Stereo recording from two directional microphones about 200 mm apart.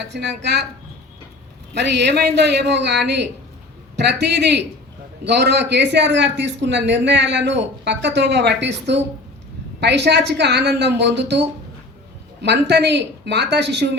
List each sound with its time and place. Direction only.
0.0 s a man's voice: 55° right (ahead or behind)
1.7 s a man's voice: 60° right (ahead or behind)